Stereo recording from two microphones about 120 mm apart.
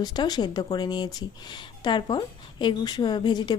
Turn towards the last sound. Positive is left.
turn(degrees=35)  # may be behind; listen again after turning